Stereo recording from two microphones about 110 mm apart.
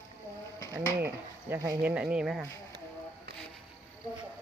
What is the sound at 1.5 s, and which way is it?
Speech, 15° right (ahead or behind).